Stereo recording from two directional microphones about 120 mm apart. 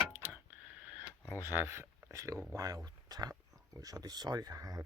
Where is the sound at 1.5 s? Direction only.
20° right (ahead or behind).